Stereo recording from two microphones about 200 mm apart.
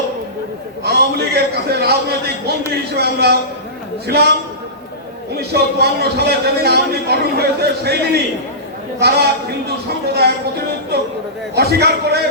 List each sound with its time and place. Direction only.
0.9 s a man's voice: 55° right (ahead or behind)
5.4 s a man's voice: 55° right (ahead or behind)
10.9 s a man's voice: 55° right (ahead or behind)